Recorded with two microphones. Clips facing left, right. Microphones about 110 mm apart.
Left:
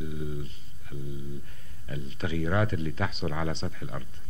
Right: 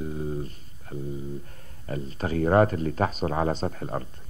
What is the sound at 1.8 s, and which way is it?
Speech, 40° right (ahead or behind).